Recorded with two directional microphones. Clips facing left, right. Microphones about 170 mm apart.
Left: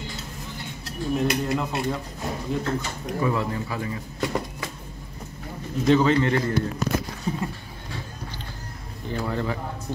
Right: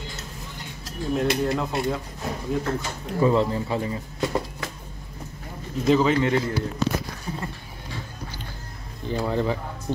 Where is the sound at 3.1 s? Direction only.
25° right (ahead or behind).